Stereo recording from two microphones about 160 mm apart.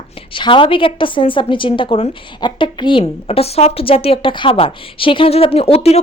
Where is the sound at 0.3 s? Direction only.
30° left (ahead or behind).